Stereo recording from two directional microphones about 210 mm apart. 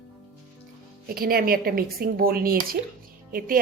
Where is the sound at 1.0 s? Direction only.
45° right (ahead or behind).